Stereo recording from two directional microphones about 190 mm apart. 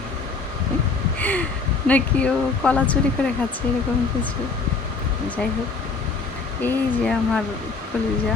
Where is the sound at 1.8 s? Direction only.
5° left (ahead or behind).